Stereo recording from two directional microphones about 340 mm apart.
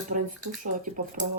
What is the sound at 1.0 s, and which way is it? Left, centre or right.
Speech, right.